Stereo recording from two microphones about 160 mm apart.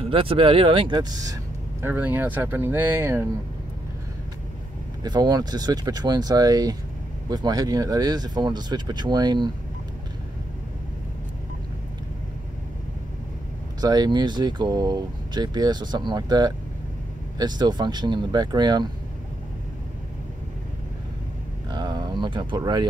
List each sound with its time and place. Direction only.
0.1 s speech: 35° right (ahead or behind)
1.8 s speech: 10° right (ahead or behind)
5.0 s speech: 25° right (ahead or behind)
13.7 s speech: 25° right (ahead or behind)
21.6 s a sound: 25° right (ahead or behind)